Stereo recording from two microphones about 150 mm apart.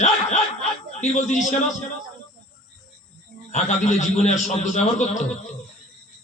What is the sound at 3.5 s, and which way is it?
Speech, 55° left (ahead or behind).